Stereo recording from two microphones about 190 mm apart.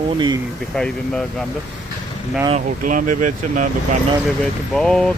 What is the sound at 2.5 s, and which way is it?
Speech, 45° right (ahead or behind).